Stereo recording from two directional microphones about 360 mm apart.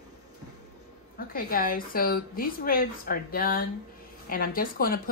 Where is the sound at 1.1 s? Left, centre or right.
Left.